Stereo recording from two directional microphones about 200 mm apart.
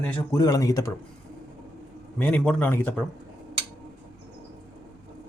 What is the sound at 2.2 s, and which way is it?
Speech, 5° left (ahead or behind).